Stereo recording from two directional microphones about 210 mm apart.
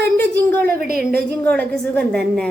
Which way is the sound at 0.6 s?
45° right (ahead or behind).